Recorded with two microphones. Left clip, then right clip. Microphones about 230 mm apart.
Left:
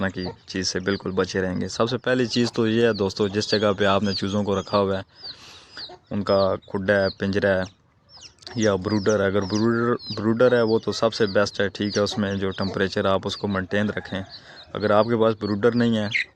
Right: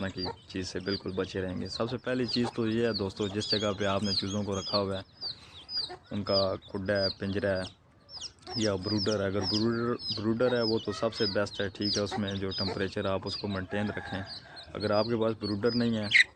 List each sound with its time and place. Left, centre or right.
0.5 s speech: left